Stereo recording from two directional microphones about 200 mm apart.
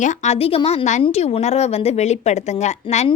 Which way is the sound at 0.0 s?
30° left (ahead or behind).